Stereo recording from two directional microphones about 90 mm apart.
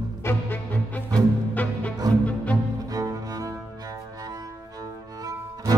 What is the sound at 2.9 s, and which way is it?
Music, 40° right (ahead or behind).